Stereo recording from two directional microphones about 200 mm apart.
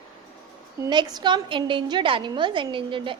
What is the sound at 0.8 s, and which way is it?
A woman's voice, 20° right (ahead or behind).